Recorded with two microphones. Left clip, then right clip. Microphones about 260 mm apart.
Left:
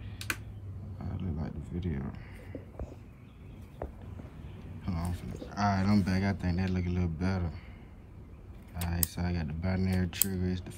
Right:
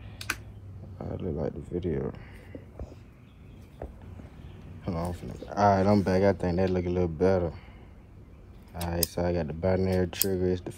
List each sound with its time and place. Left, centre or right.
0.9 s speech: centre
3.8 s vehicle: right
4.8 s speech: centre
8.9 s speech: centre